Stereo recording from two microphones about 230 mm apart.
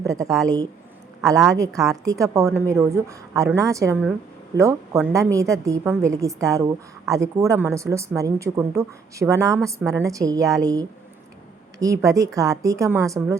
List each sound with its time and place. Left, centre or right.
0.0 s a woman's voice: centre
1.5 s a woman's voice: centre